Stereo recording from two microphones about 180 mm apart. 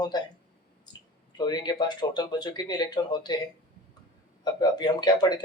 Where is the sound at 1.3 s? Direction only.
20° left (ahead or behind).